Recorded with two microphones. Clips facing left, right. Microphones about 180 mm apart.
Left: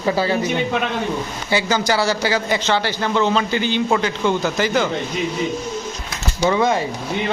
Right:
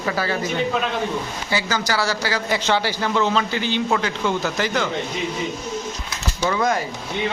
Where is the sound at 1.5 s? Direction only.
25° left (ahead or behind).